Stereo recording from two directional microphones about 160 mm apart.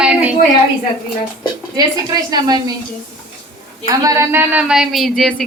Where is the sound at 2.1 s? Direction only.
25° right (ahead or behind).